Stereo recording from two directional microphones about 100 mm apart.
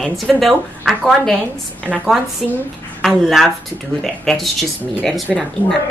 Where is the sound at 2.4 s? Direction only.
Centre (ahead or behind).